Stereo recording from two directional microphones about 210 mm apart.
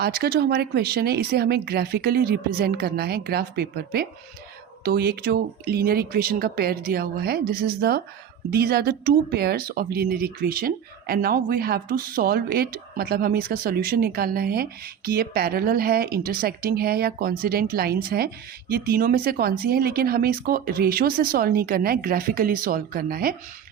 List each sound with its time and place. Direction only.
0.0 s speech: 50° right (ahead or behind)